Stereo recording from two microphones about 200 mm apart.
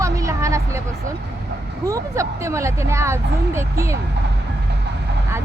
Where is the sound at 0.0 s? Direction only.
15° right (ahead or behind).